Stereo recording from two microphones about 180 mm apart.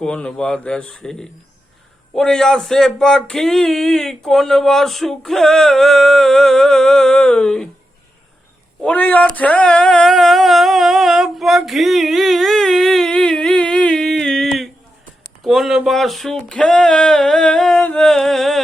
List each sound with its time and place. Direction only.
0.0 s male singing: 5° left (ahead or behind)
8.8 s a sound: 5° left (ahead or behind)
15.4 s male singing: centre (ahead or behind)